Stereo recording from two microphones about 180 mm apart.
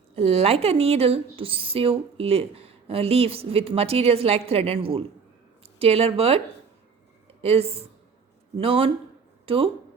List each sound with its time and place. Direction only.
0.2 s a woman's voice: 35° right (ahead or behind)
7.4 s a woman's voice: 35° right (ahead or behind)